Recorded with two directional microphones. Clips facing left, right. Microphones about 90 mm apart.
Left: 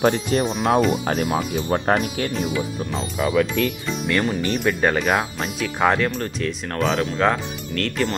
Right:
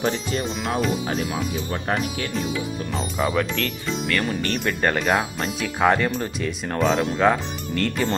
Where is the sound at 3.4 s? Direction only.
5° left (ahead or behind).